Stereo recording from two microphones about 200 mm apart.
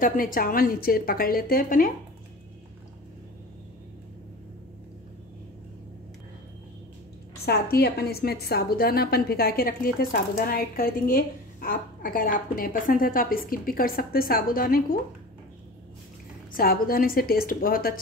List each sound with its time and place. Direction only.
0.0 s a woman's voice: 45° left (ahead or behind)
7.4 s a woman's voice: 50° left (ahead or behind)
16.5 s a woman's voice: 45° left (ahead or behind)